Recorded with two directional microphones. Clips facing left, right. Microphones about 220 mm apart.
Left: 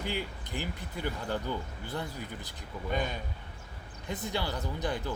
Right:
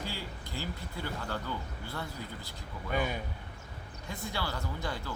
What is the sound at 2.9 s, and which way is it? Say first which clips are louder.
Speech: even; 10° right (ahead or behind).